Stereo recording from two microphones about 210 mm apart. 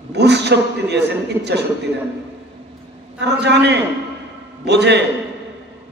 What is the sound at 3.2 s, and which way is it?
A man's voice, 55° right (ahead or behind).